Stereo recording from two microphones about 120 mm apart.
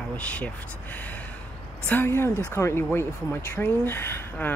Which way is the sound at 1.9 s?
20° left (ahead or behind).